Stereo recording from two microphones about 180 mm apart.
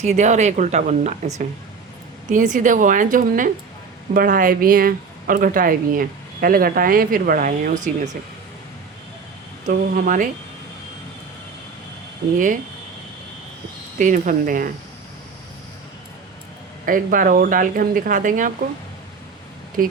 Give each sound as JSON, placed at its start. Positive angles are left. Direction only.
{"t": 0.0, "sound": "speech", "side_deg": -40}
{"t": 9.6, "sound": "speech", "side_deg": -45}
{"t": 14.0, "sound": "speech", "side_deg": -45}
{"t": 16.8, "sound": "speech", "side_deg": -50}
{"t": 19.8, "sound": "speech", "side_deg": -50}